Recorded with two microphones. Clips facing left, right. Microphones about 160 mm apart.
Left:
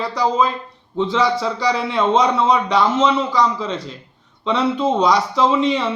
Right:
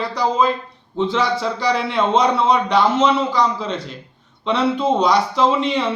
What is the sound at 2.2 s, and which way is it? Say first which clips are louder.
A man's voice: right 1 dB; 35° right (ahead or behind).